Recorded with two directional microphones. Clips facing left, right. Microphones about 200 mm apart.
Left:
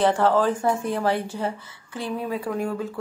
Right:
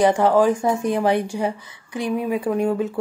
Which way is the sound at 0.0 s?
15° right (ahead or behind).